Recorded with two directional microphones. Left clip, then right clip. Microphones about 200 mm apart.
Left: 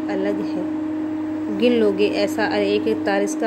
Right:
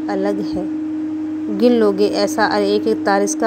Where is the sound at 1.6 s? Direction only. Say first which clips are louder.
Right 3 dB; 20° right (ahead or behind).